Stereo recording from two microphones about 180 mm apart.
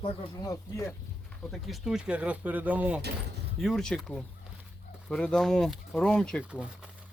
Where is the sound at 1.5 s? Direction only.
Centre (ahead or behind).